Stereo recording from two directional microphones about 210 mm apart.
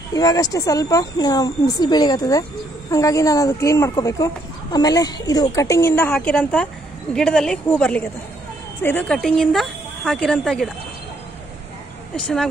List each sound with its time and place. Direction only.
0.1 s a woman's voice: 15° left (ahead or behind)